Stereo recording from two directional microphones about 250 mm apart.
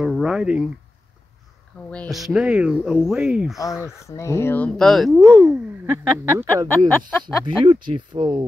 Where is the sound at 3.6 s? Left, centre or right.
Centre.